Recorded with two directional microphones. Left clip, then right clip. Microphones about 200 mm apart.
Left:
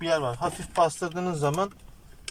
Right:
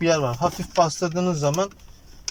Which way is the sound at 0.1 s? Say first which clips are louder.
Right 1 dB; 15° right (ahead or behind).